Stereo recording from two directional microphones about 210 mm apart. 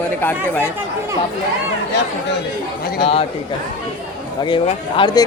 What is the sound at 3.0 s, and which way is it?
Speech, 25° left (ahead or behind).